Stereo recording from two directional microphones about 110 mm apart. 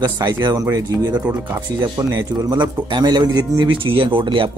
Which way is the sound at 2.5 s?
40° right (ahead or behind).